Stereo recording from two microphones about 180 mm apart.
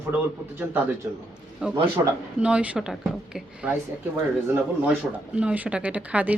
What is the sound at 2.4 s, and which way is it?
Speech, 5° right (ahead or behind).